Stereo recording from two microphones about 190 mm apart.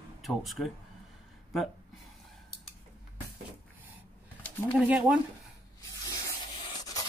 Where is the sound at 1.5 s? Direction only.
Centre (ahead or behind).